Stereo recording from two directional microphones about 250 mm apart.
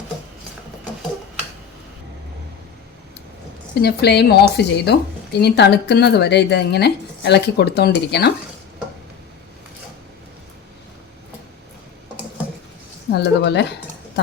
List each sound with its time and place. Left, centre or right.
3.8 s speech: left
13.1 s speech: left